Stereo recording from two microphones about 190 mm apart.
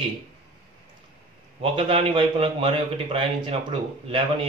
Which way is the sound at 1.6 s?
30° right (ahead or behind).